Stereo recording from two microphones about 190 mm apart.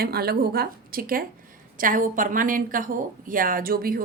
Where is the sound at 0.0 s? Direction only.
55° right (ahead or behind).